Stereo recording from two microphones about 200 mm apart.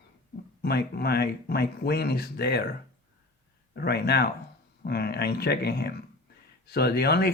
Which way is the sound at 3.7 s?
55° left (ahead or behind).